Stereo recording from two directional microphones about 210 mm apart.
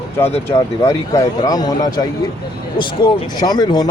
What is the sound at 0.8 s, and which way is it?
Speech, 15° left (ahead or behind).